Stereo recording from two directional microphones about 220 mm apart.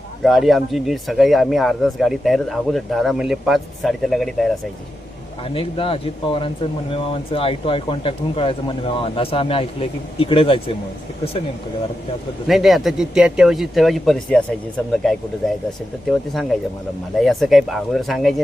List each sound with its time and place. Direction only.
0.2 s speech: centre (ahead or behind)
5.5 s speech: 25° left (ahead or behind)
12.5 s speech: centre (ahead or behind)
16.0 s speech: centre (ahead or behind)